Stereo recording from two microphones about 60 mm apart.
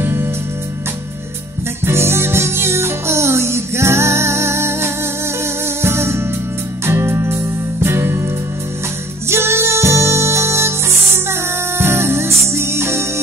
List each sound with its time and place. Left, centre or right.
0.0 s music: right
1.9 s music: right
9.3 s music: right
11.8 s music: right